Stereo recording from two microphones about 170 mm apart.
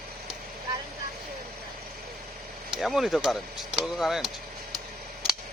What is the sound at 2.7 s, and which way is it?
Speech, centre (ahead or behind).